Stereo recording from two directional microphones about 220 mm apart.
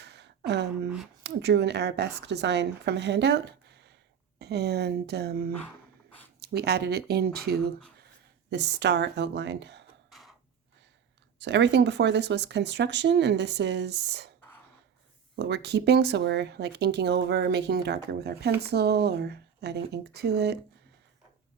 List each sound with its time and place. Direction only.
0.0 s a sound: 50° right (ahead or behind)
0.9 s speech: centre (ahead or behind)
1.2 s speech: 50° right (ahead or behind)
10.1 s a sound: centre (ahead or behind)
11.3 s speech: 50° right (ahead or behind)
15.4 s speech: 50° right (ahead or behind)